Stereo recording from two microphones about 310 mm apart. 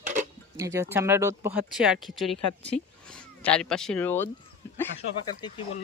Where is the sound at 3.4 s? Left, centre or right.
Centre.